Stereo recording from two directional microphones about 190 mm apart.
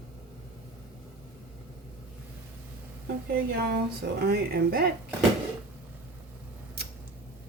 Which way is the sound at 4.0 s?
55° right (ahead or behind).